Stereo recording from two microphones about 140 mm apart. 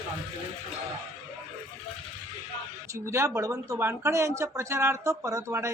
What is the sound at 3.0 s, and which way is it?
Speech, 20° right (ahead or behind).